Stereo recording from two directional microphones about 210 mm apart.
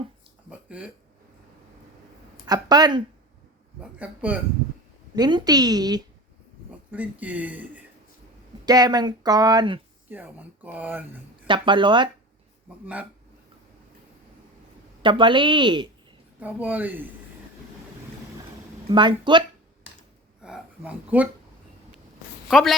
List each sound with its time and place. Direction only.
0.5 s a sound: 5° right (ahead or behind)
2.5 s speech: 20° right (ahead or behind)
3.8 s speech: 5° right (ahead or behind)
5.1 s speech: 20° right (ahead or behind)
6.7 s speech: 5° right (ahead or behind)
8.6 s speech: 20° right (ahead or behind)
10.1 s speech: 10° right (ahead or behind)
11.4 s speech: 25° right (ahead or behind)
12.8 s speech: 5° right (ahead or behind)
15.0 s speech: 25° right (ahead or behind)
16.4 s speech: 10° right (ahead or behind)
18.9 s speech: 20° right (ahead or behind)
20.4 s speech: 5° right (ahead or behind)
22.4 s a woman's voice: centre (ahead or behind)